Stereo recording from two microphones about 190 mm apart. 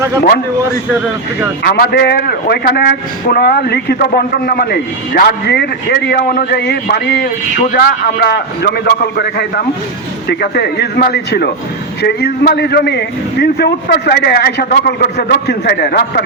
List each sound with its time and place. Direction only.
1.6 s a man's voice: 55° left (ahead or behind)